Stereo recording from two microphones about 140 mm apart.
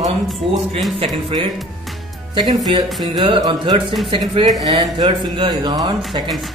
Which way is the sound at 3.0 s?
30° right (ahead or behind).